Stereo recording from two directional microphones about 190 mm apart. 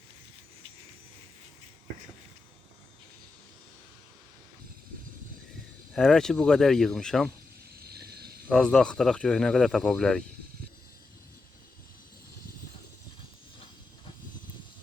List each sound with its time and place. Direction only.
5.9 s speech: 5° left (ahead or behind)
7.8 s vehicle: 55° right (ahead or behind)
8.4 s speech: 5° left (ahead or behind)